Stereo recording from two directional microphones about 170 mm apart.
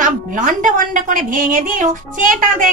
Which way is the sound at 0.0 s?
50° right (ahead or behind).